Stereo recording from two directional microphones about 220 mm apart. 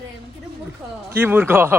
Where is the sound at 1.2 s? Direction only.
10° right (ahead or behind).